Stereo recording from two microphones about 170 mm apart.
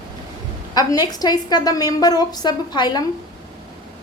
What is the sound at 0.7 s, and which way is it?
A woman's voice, 25° left (ahead or behind).